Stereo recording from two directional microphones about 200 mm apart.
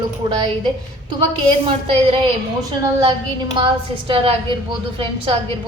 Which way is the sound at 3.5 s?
25° right (ahead or behind).